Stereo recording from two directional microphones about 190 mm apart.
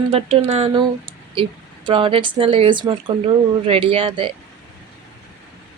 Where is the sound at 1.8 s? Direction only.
25° right (ahead or behind).